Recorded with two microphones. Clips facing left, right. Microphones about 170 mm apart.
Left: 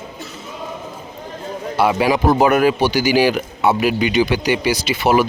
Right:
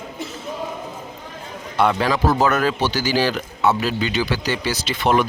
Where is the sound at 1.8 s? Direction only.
10° left (ahead or behind).